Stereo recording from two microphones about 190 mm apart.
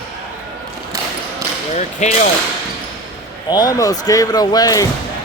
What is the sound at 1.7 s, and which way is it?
Speech, 40° left (ahead or behind).